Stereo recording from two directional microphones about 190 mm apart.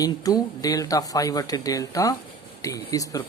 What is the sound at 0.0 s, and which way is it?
Speech, 20° left (ahead or behind).